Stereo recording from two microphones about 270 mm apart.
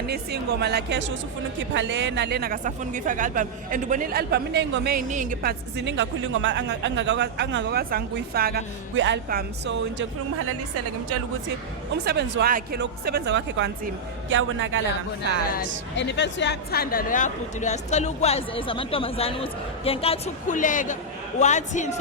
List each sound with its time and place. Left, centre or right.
0.1 s a woman's voice: right
12.0 s a woman's voice: right
16.0 s speech: left